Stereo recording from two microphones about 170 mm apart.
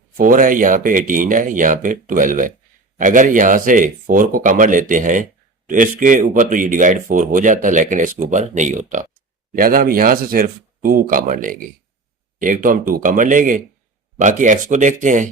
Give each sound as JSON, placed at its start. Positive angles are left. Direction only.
{"t": 0.2, "sound": "speech", "side_deg": -55}